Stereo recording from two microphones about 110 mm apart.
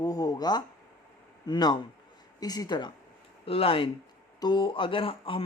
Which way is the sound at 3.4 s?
60° left (ahead or behind).